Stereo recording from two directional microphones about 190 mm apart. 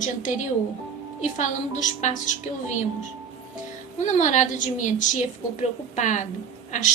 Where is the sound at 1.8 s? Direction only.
40° left (ahead or behind).